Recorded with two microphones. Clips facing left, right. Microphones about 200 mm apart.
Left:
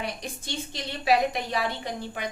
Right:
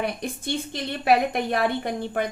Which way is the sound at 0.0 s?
55° right (ahead or behind).